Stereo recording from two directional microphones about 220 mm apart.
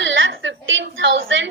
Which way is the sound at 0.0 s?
60° right (ahead or behind).